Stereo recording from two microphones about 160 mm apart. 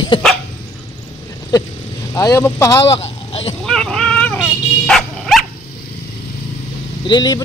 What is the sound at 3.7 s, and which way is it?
Dog, 5° left (ahead or behind).